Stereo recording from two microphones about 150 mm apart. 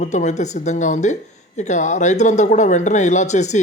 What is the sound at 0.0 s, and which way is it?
Speech, 55° left (ahead or behind).